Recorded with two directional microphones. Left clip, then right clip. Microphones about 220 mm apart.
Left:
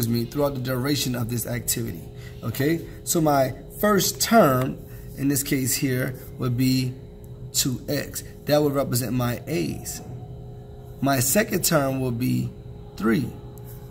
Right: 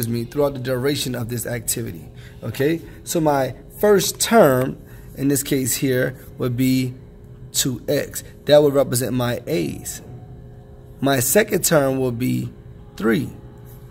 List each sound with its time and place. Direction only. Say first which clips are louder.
0.0 s speech: right 3 dB; 25° right (ahead or behind)